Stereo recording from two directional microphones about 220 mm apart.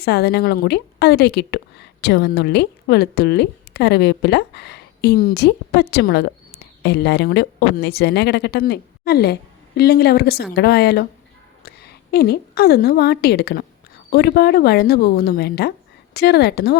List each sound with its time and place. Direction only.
0.0 s a woman's voice: 50° left (ahead or behind)